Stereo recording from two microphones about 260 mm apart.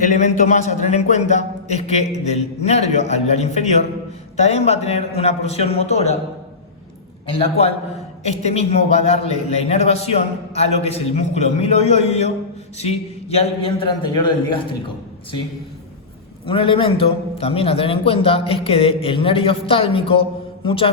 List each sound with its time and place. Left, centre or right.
0.0 s a man's voice: left
7.3 s a man's voice: left
16.5 s a man's voice: left